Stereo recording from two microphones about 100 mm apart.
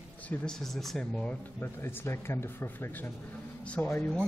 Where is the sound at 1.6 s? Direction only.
25° left (ahead or behind).